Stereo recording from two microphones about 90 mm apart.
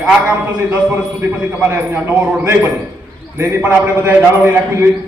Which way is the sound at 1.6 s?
20° right (ahead or behind).